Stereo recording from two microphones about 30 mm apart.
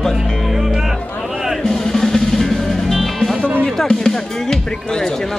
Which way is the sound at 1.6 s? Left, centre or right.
Centre.